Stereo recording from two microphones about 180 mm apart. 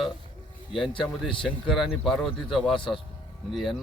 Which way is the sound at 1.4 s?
Centre (ahead or behind).